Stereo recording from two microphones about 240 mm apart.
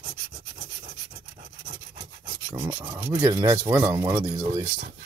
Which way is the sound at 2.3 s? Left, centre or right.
Centre.